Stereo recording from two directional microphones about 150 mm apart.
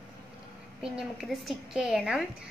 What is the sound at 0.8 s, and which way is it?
A woman's voice, centre (ahead or behind).